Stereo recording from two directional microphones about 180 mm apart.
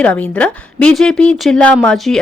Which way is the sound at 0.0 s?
10° left (ahead or behind).